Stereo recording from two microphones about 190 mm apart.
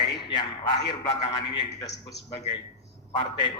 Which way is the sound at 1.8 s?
20° left (ahead or behind).